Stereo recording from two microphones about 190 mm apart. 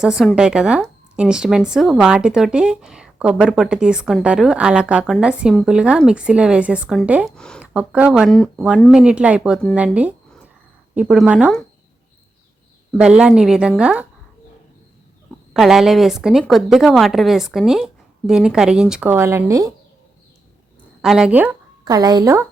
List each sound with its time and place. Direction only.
0.0 s speech: 5° right (ahead or behind)
7.3 s speech: 5° left (ahead or behind)
9.7 s a sound: 5° right (ahead or behind)
10.9 s speech: 5° right (ahead or behind)
12.9 s speech: 5° right (ahead or behind)
15.5 s speech: centre (ahead or behind)
21.0 s speech: 5° right (ahead or behind)
21.8 s a woman's voice: 20° right (ahead or behind)